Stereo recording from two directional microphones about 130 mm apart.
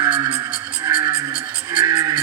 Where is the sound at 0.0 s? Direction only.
30° right (ahead or behind).